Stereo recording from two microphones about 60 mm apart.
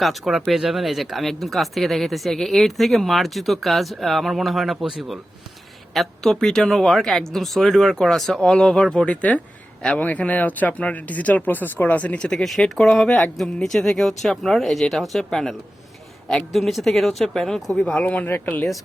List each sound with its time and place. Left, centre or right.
0.0 s speech: centre
10.0 s speech: left
12.3 s speech: centre
18.0 s speech: left